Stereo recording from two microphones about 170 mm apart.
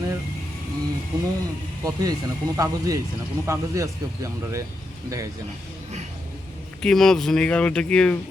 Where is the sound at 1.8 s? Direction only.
20° right (ahead or behind).